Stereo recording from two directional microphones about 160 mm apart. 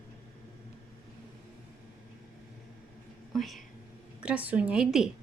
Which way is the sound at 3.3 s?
Centre (ahead or behind).